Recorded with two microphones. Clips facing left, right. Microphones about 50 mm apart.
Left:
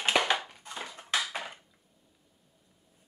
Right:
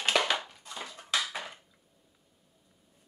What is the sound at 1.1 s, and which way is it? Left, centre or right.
Dishes, centre.